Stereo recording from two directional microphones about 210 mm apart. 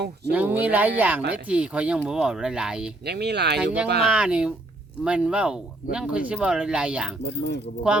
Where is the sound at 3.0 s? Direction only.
50° right (ahead or behind).